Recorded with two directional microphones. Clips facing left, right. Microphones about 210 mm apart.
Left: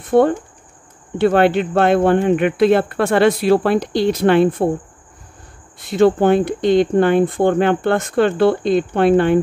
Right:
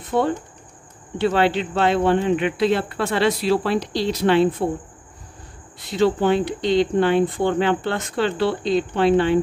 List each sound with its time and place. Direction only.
0.1 s speech: 55° left (ahead or behind)
5.9 s speech: 50° left (ahead or behind)